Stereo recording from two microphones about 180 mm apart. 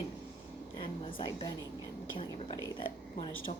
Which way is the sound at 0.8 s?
25° left (ahead or behind).